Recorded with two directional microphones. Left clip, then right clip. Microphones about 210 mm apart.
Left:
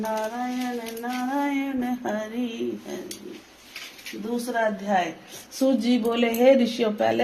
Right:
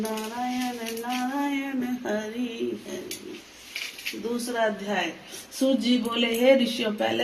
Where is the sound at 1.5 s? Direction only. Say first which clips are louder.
Left 2 dB; 50° left (ahead or behind).